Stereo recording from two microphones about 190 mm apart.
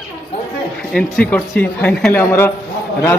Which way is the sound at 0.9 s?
5° left (ahead or behind).